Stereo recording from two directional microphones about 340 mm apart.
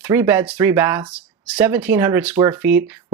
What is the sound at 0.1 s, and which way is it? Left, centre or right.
Speech, centre.